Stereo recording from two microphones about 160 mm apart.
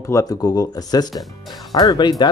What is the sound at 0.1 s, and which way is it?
Speech, 20° left (ahead or behind).